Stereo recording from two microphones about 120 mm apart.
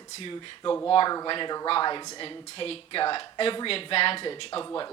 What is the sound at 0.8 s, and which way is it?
Speech, 40° left (ahead or behind).